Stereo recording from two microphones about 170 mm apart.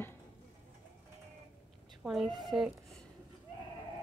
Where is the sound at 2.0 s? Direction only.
Centre (ahead or behind).